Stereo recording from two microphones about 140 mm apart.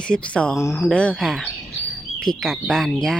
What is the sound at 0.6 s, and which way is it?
Speech, 20° left (ahead or behind).